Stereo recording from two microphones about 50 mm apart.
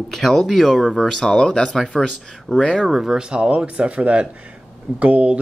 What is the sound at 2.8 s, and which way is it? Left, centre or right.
Speech, centre.